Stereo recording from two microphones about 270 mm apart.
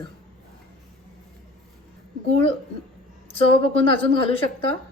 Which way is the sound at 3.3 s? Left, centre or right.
Left.